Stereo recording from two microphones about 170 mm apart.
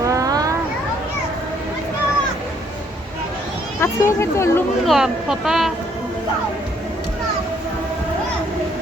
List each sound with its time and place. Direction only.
0.0 s a sound: 20° right (ahead or behind)
3.8 s speech: 15° left (ahead or behind)
4.9 s speech: centre (ahead or behind)